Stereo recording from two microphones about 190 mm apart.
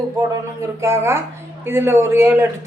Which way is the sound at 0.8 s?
15° right (ahead or behind).